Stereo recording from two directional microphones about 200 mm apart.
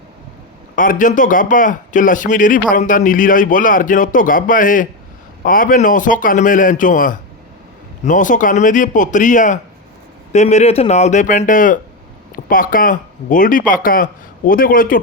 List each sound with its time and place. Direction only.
0.8 s a man's voice: 40° left (ahead or behind)